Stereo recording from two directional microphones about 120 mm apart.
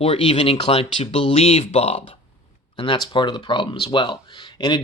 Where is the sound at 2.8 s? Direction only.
40° left (ahead or behind).